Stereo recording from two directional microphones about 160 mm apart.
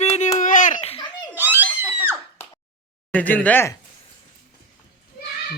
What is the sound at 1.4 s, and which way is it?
Screaming, 10° right (ahead or behind).